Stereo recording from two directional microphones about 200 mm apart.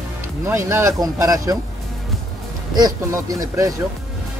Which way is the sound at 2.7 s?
20° right (ahead or behind).